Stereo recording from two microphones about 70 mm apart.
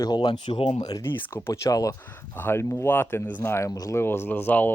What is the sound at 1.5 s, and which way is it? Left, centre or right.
Speech, left.